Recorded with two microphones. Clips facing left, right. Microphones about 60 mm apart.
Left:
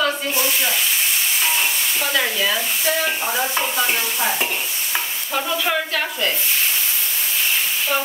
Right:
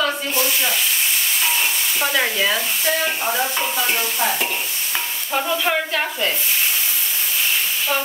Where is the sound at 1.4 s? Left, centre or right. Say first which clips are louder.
Even; centre.